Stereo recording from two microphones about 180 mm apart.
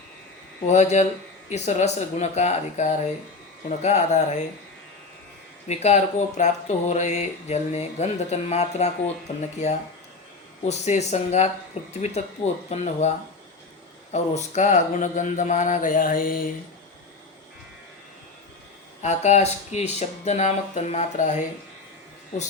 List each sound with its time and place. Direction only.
0.7 s speech: 40° left (ahead or behind)
5.6 s speech: 35° left (ahead or behind)
10.7 s speech: 40° left (ahead or behind)
19.0 s speech: 40° left (ahead or behind)